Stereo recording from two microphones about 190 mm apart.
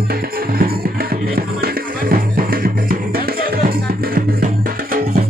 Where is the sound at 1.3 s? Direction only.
50° right (ahead or behind).